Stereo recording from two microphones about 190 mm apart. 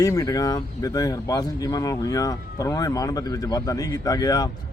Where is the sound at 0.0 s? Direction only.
20° left (ahead or behind).